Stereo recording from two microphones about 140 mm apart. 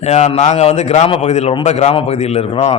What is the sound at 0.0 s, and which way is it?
A man's voice, 50° left (ahead or behind).